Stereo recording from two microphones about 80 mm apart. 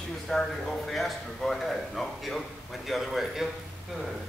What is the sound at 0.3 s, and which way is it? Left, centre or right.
Speech, centre.